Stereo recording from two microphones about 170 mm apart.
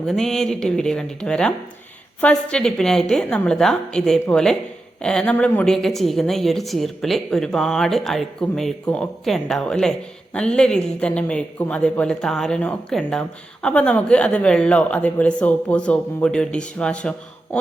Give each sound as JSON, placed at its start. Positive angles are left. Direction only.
{"t": 0.1, "sound": "a man's voice", "side_deg": 5}